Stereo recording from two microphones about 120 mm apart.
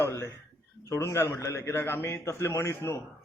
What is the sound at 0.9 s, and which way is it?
Speech, 25° left (ahead or behind).